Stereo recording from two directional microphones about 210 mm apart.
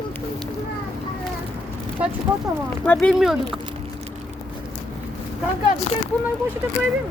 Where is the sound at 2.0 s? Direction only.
5° right (ahead or behind).